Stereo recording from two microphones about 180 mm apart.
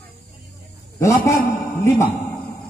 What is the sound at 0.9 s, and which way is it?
A man's voice, 15° left (ahead or behind).